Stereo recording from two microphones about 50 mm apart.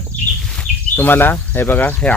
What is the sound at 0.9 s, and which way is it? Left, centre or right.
Speech, left.